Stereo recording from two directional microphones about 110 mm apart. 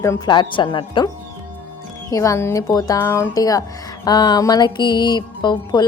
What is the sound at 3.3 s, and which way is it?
Music, 35° left (ahead or behind).